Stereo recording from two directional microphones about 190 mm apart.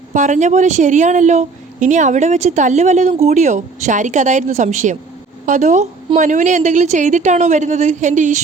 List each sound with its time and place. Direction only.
0.1 s a woman's voice: 40° right (ahead or behind)